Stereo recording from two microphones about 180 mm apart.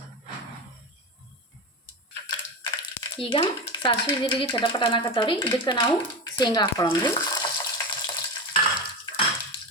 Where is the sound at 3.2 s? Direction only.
30° left (ahead or behind).